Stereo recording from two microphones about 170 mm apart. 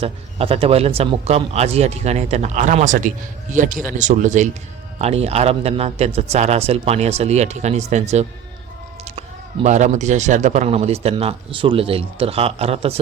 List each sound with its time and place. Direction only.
0.0 s speech: 35° right (ahead or behind)
9.6 s speech: 45° right (ahead or behind)